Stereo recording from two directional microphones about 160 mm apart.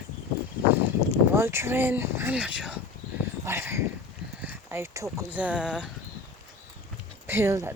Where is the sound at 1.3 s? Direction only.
15° right (ahead or behind).